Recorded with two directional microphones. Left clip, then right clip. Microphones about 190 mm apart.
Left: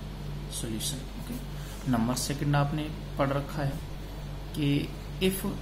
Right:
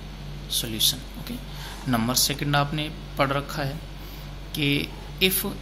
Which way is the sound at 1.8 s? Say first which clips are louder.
Right 6 dB; 20° right (ahead or behind).